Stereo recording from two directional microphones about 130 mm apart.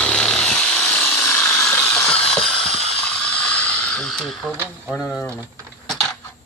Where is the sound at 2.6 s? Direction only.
45° left (ahead or behind).